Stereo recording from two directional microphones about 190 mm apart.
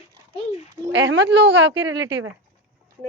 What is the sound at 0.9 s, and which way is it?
Speech, 75° right (ahead or behind).